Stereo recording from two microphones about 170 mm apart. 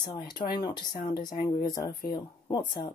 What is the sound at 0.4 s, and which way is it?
Speech, 25° left (ahead or behind).